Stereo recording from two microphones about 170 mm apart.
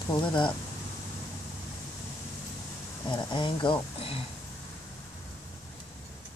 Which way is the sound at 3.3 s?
30° left (ahead or behind).